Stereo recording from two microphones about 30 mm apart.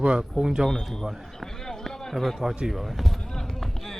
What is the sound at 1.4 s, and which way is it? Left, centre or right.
Run, centre.